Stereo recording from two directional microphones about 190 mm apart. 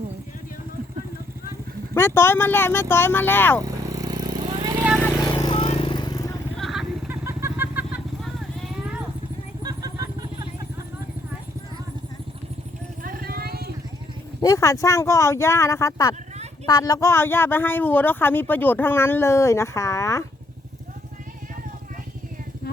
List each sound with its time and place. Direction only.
1.9 s speech: 15° left (ahead or behind)
3.6 s vehicle: 15° right (ahead or behind)
5.3 s vehicle: 25° left (ahead or behind)
6.6 s vehicle: centre (ahead or behind)
7.1 s vehicle: 10° right (ahead or behind)
9.6 s vehicle: 20° right (ahead or behind)
13.0 s vehicle: 45° right (ahead or behind)
14.4 s speech: 15° left (ahead or behind)